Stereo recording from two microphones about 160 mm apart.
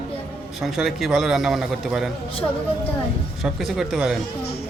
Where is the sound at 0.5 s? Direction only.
Centre (ahead or behind).